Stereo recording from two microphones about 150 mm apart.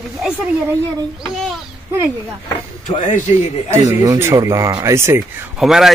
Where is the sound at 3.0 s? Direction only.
55° left (ahead or behind).